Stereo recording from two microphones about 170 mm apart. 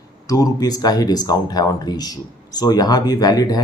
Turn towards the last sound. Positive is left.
turn(degrees=25)  # may be behind; listen again after turning